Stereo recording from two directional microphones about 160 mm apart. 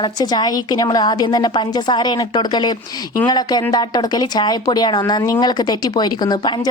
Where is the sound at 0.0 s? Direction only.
25° left (ahead or behind).